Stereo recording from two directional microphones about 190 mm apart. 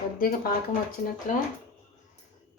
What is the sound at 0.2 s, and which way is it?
Speech, 50° left (ahead or behind).